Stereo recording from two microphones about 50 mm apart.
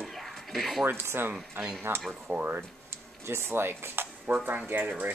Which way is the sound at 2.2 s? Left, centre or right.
Right.